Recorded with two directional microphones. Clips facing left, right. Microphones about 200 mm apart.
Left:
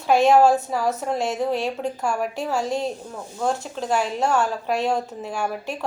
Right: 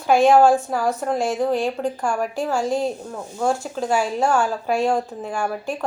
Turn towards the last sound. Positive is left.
turn(degrees=0)  # may be behind; listen again after turning